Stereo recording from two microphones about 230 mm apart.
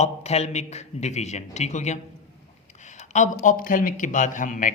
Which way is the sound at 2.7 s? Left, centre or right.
Left.